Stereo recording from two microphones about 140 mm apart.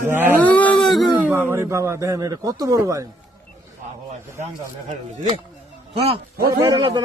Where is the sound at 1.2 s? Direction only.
15° right (ahead or behind).